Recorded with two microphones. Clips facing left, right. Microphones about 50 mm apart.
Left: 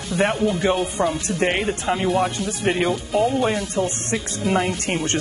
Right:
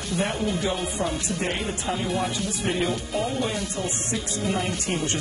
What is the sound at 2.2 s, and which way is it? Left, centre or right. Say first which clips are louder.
Speech: left 5 dB; left.